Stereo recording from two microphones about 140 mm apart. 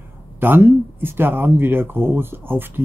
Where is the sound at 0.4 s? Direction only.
15° right (ahead or behind).